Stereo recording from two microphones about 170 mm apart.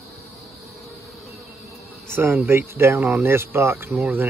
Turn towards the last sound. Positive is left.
turn(degrees=-10)  # may be behind; listen again after turning